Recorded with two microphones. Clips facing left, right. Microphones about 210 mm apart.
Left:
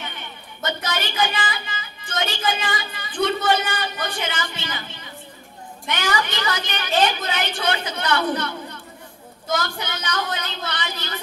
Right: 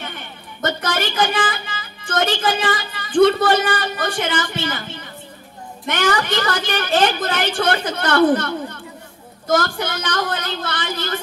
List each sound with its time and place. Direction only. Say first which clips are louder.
0.0 s a woman's voice: right 3 dB; 50° right (ahead or behind)